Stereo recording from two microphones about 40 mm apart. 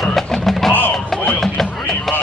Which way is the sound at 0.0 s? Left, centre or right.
Centre.